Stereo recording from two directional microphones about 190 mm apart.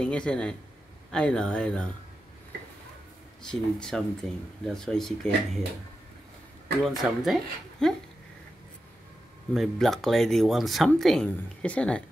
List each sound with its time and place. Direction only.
0.0 s speech: 5° left (ahead or behind)
3.4 s speech: centre (ahead or behind)
6.8 s speech: centre (ahead or behind)
9.5 s speech: centre (ahead or behind)